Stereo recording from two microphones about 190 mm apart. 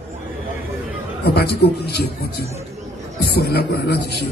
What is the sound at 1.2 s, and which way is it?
A man's voice, 60° left (ahead or behind).